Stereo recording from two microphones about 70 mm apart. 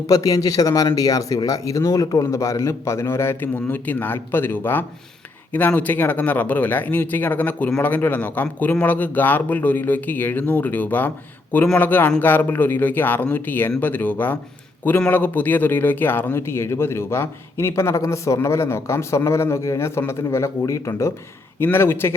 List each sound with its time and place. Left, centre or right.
0.1 s a man's voice: left
20.0 s a man's voice: left
20.2 s speech: left
21.6 s a man's voice: left